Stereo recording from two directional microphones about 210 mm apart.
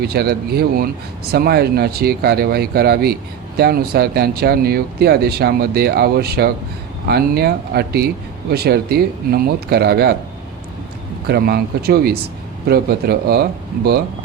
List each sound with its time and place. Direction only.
0.0 s a man's voice: 50° right (ahead or behind)
11.3 s a man's voice: 50° right (ahead or behind)